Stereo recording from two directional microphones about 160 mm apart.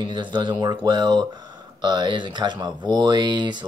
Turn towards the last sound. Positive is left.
turn(degrees=-30)  # may be behind; listen again after turning